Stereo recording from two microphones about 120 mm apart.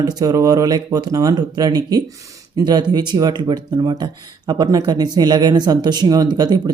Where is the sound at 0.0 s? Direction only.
35° right (ahead or behind).